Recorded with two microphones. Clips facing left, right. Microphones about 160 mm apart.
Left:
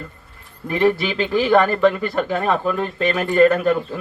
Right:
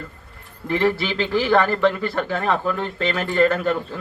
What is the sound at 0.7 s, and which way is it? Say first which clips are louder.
Speech: left 2 dB; 20° left (ahead or behind).